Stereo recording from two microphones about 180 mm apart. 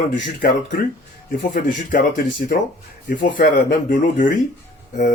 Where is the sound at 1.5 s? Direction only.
55° left (ahead or behind).